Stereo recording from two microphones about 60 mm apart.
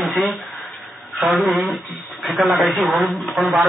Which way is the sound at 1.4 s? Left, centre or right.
Centre.